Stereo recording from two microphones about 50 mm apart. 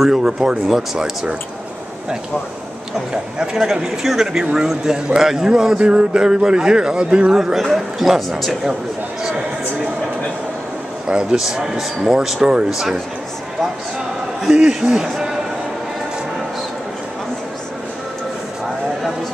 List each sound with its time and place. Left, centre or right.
0.2 s a man's voice: centre
3.3 s a man's voice: centre
7.3 s a man's voice: centre
11.1 s a man's voice: centre
14.4 s a man's voice: centre